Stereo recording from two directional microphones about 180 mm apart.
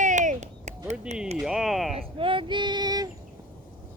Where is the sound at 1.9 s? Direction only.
30° right (ahead or behind).